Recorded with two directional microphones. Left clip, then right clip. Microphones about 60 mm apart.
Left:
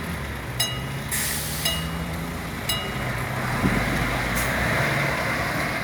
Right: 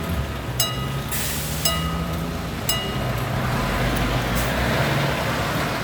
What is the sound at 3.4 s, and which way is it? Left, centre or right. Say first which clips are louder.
Vehicle: even; left.